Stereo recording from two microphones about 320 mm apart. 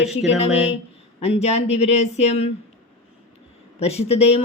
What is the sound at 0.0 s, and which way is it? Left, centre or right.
Speech, centre.